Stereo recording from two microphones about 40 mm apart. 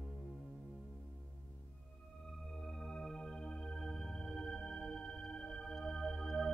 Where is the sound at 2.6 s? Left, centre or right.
Centre.